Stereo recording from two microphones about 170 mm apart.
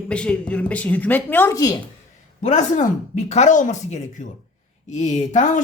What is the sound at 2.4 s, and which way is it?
A woman's voice, 45° left (ahead or behind).